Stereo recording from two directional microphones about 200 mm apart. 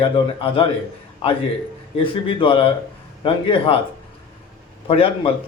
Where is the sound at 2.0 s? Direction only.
25° left (ahead or behind).